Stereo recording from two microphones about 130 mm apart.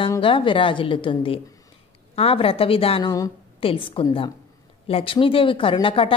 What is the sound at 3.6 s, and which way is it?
A woman's voice, 40° left (ahead or behind).